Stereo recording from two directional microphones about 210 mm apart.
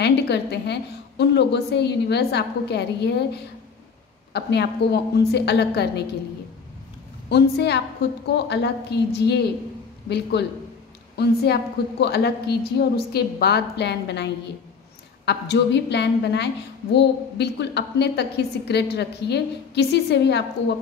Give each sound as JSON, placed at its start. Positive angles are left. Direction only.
{"t": 0.0, "sound": "a woman's voice", "side_deg": 55}
{"t": 4.3, "sound": "a woman's voice", "side_deg": 50}
{"t": 7.2, "sound": "a woman's voice", "side_deg": 50}